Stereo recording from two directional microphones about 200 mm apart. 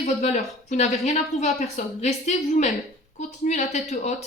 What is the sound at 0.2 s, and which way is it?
Speech, 35° left (ahead or behind).